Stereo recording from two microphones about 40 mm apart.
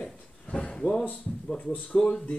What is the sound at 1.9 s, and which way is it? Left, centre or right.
Speech, centre.